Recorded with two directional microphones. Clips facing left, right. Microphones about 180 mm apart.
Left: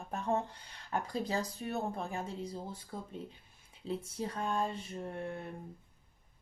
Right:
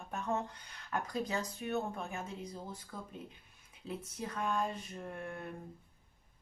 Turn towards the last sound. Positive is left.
turn(degrees=25)  # may be behind; listen again after turning